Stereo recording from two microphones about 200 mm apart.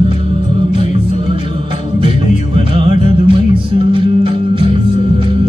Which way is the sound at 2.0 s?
25° right (ahead or behind).